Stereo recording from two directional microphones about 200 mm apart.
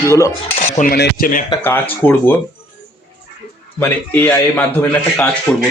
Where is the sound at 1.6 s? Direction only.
10° left (ahead or behind).